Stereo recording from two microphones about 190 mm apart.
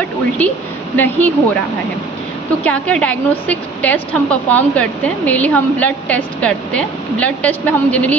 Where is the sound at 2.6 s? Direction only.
5° left (ahead or behind).